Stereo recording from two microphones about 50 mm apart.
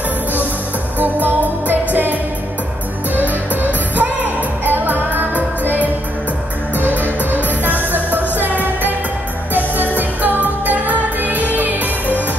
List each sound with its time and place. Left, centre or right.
0.9 s music: right
3.6 s music: right
7.9 s music: right
9.5 s music of asia: right